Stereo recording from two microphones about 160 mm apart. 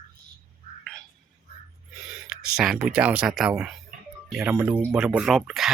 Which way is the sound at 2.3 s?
Centre (ahead or behind).